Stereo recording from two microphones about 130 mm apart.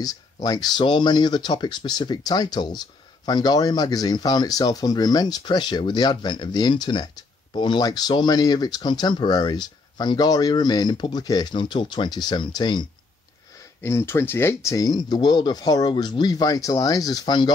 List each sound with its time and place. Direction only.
0.0 s speech: 30° left (ahead or behind)
13.7 s speech: 20° left (ahead or behind)